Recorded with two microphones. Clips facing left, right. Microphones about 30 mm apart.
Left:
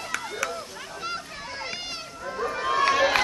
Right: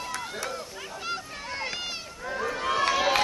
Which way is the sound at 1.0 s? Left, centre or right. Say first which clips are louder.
Left 1 dB; centre.